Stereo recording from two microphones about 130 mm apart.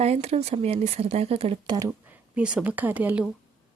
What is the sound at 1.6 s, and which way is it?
Speech, 30° right (ahead or behind).